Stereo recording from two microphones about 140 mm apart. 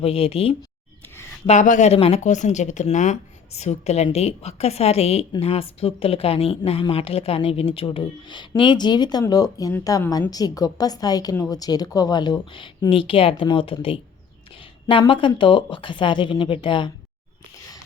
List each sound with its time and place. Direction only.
0.0 s speech: 45° left (ahead or behind)
1.5 s speech: 60° left (ahead or behind)
1.9 s a woman's voice: 45° left (ahead or behind)